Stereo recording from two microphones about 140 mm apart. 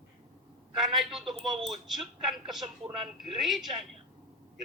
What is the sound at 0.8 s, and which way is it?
A woman's voice, centre (ahead or behind).